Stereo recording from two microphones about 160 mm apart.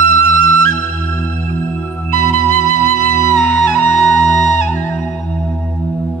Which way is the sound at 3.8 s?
50° left (ahead or behind).